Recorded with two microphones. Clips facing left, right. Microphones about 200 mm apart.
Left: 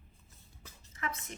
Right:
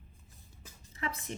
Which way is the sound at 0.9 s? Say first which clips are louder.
Right 1 dB; 35° right (ahead or behind).